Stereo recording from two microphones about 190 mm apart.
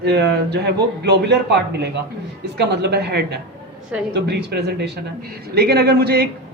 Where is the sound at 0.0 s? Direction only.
60° right (ahead or behind).